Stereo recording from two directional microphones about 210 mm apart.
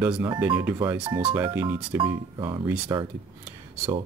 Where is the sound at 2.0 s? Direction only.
20° right (ahead or behind).